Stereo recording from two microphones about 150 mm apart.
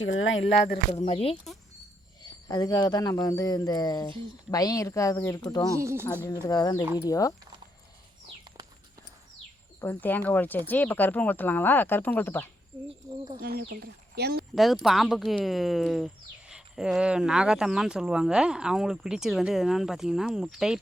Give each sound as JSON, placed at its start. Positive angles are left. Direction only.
{"t": 1.0, "sound": "speech", "side_deg": 40}
{"t": 2.2, "sound": "speech", "side_deg": 25}
{"t": 5.7, "sound": "speech", "side_deg": -20}
{"t": 6.2, "sound": "speech", "side_deg": 25}
{"t": 9.8, "sound": "speech", "side_deg": 15}
{"t": 12.9, "sound": "speech", "side_deg": -30}
{"t": 13.4, "sound": "speech", "side_deg": -90}
{"t": 14.5, "sound": "speech", "side_deg": 0}